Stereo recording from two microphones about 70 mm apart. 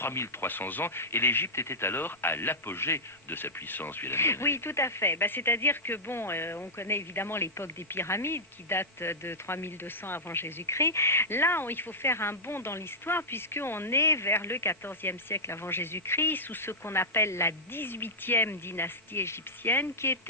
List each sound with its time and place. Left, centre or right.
0.0 s speech: left